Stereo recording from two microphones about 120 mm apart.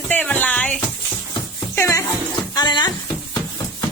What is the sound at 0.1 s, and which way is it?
Music, 15° left (ahead or behind).